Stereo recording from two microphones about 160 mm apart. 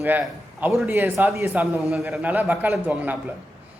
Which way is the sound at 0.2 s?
Centre (ahead or behind).